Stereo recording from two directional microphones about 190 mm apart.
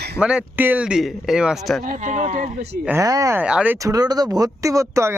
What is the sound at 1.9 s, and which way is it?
Speech, 40° right (ahead or behind).